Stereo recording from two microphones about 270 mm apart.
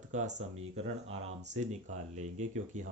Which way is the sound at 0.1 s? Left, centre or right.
Right.